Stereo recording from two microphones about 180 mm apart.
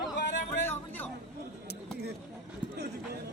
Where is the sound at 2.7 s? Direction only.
65° right (ahead or behind).